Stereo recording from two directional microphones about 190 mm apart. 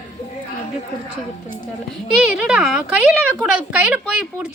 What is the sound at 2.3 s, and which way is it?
A woman's voice, 5° right (ahead or behind).